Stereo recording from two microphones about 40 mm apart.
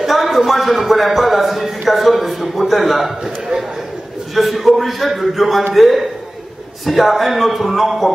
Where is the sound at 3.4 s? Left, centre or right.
Centre.